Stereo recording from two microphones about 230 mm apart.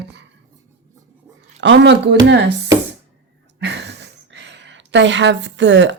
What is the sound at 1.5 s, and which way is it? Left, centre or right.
Speech, right.